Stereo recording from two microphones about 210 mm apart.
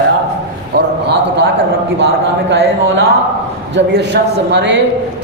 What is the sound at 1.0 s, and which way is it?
Speech, 55° right (ahead or behind).